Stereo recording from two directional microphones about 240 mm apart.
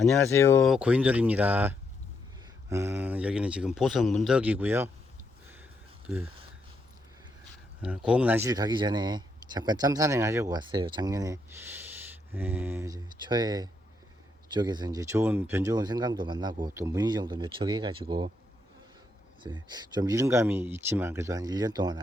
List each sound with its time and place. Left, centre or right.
0.0 s speech: centre
0.7 s speech: centre
6.1 s speech: centre
7.8 s speech: centre
19.4 s speech: centre